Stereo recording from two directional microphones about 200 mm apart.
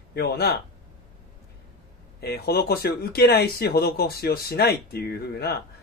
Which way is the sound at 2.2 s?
55° left (ahead or behind).